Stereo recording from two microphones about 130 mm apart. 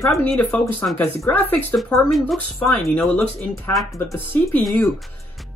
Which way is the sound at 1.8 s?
Centre (ahead or behind).